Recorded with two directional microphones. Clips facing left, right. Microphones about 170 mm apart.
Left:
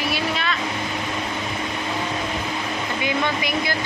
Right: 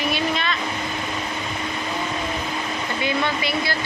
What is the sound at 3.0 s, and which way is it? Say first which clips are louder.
Speech: even; 15° left (ahead or behind).